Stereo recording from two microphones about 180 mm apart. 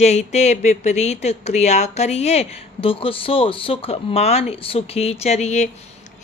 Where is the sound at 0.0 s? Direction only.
40° left (ahead or behind).